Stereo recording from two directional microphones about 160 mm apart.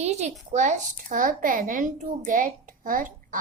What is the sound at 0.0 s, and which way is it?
A woman's voice, 45° right (ahead or behind).